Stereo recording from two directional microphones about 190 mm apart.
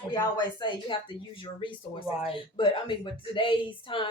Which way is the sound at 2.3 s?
25° left (ahead or behind).